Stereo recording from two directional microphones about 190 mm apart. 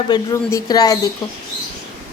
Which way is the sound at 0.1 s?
20° left (ahead or behind).